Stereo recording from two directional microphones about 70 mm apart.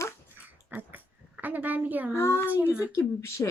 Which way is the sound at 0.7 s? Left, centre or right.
Right.